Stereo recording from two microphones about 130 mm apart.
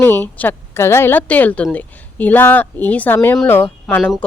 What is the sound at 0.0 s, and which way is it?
A woman's voice, 15° left (ahead or behind).